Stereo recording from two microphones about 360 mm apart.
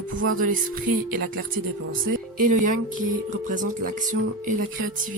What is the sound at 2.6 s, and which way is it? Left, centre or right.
Speech, right.